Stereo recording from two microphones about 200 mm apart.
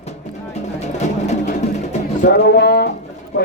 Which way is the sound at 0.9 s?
35° left (ahead or behind).